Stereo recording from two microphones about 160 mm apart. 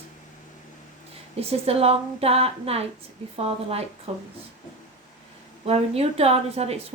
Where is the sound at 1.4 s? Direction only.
40° right (ahead or behind).